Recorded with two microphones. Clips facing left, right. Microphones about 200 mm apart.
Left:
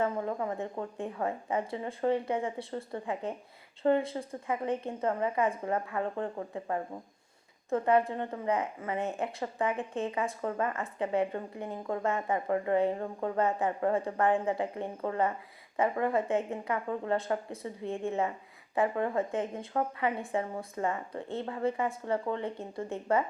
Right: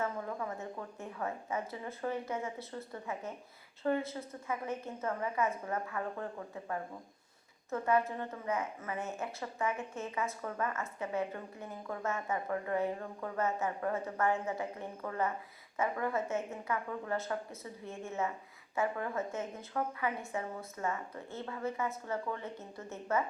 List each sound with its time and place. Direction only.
0.0 s a woman's voice: 30° left (ahead or behind)